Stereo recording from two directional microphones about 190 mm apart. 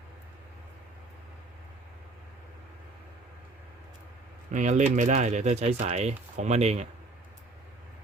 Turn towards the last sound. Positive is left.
turn(degrees=-35)  # may be behind; listen again after turning